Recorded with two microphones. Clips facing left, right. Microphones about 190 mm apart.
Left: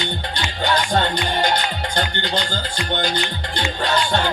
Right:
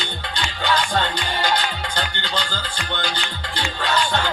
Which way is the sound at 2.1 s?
45° left (ahead or behind).